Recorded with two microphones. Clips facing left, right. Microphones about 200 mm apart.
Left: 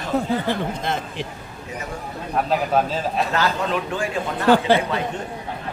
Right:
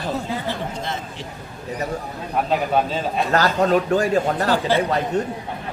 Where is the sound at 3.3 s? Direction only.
40° right (ahead or behind).